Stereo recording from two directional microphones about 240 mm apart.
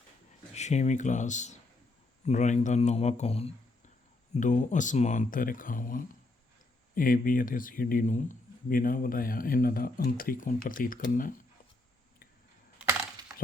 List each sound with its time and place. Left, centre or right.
0.5 s speech: left